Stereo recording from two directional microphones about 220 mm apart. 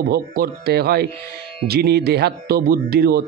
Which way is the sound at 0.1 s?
45° right (ahead or behind).